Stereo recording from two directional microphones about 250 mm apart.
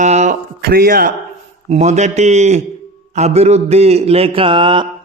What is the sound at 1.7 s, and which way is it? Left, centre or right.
A man's voice, right.